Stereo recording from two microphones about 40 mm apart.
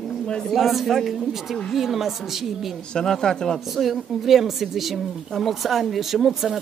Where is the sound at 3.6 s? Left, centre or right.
Centre.